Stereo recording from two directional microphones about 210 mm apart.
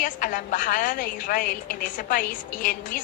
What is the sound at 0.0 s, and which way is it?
Speech, 40° left (ahead or behind).